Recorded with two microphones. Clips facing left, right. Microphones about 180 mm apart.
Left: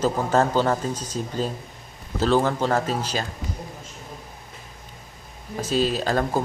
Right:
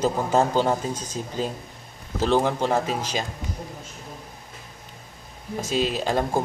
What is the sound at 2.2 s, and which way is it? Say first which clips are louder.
Speech: left 1 dB; 15° right (ahead or behind).